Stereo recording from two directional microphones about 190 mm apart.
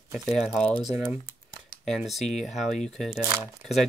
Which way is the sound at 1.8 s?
Centre (ahead or behind).